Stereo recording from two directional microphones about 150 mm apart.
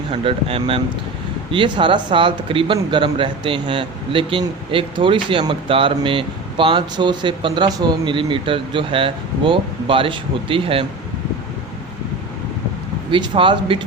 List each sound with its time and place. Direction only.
0.1 s speech: 40° right (ahead or behind)
13.1 s speech: 35° right (ahead or behind)